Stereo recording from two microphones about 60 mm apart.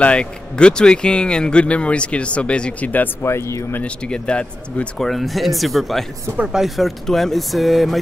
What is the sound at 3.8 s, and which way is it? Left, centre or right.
Speech, centre.